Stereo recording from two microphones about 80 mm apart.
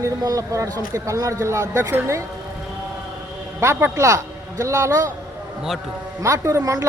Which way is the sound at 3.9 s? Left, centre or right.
Right.